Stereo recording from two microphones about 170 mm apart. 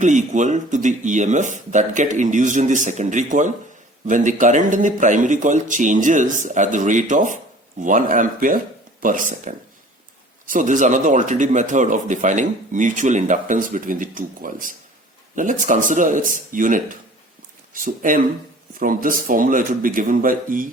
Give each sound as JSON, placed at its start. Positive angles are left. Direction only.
{"t": 0.0, "sound": "speech", "side_deg": -45}